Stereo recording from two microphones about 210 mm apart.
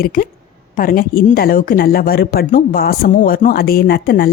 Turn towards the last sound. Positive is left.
turn(degrees=45)  # may be behind; listen again after turning